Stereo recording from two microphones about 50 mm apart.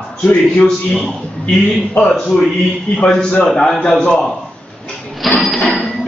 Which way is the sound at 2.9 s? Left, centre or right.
Centre.